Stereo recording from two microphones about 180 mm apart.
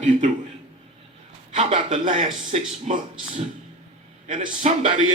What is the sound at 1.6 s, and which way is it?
A man's voice, 35° right (ahead or behind).